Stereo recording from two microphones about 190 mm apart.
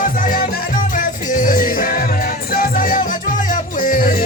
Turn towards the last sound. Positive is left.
turn(degrees=45)  # may be behind; listen again after turning